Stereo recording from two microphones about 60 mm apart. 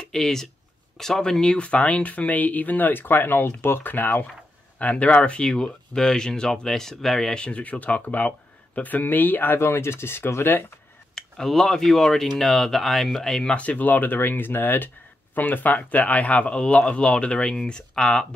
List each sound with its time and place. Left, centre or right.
0.1 s speech: centre; by 10.7 s left
11.1 s speech: centre
13.6 s speech: left